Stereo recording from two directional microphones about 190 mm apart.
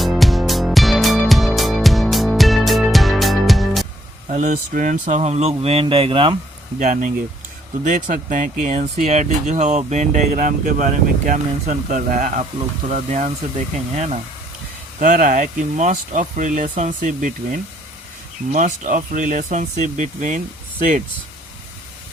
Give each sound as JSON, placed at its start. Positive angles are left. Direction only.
{"t": 0.0, "sound": "music", "side_deg": 0}
{"t": 4.3, "sound": "speech", "side_deg": -40}
{"t": 6.7, "sound": "speech", "side_deg": -40}